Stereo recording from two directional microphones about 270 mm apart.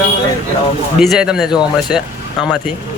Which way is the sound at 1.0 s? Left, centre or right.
Centre.